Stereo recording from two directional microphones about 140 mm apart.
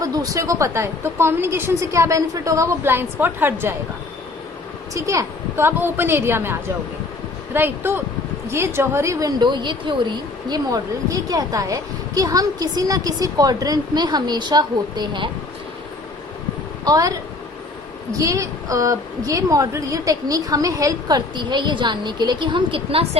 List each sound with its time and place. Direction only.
0.0 s a woman's voice: 25° right (ahead or behind)
4.9 s a woman's voice: 20° right (ahead or behind)
16.8 s a woman's voice: 25° right (ahead or behind)